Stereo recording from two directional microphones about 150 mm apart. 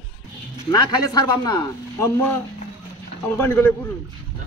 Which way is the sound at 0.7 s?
25° left (ahead or behind).